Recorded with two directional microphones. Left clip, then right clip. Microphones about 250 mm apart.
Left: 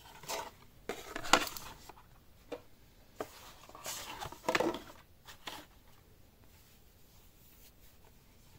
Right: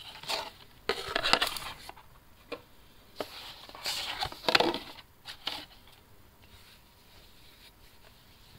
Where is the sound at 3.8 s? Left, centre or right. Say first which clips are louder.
Right 10 dB; right.